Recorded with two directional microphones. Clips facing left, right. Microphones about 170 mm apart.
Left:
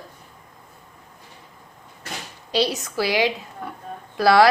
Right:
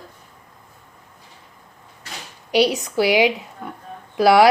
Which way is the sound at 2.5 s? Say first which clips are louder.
Right 5 dB; 15° right (ahead or behind).